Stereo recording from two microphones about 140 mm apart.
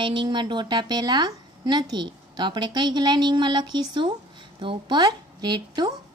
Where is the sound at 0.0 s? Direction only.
35° right (ahead or behind).